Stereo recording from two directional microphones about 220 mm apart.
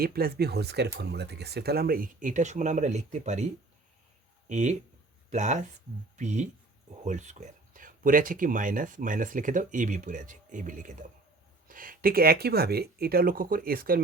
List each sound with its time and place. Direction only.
0.0 s speech: 45° right (ahead or behind)